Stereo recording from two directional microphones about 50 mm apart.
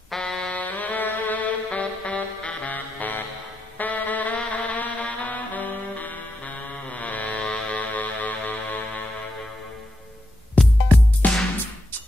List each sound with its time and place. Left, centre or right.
0.2 s music: centre
0.5 s music: left
10.6 s music: left